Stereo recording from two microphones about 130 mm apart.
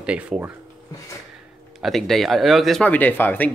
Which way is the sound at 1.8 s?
Centre (ahead or behind).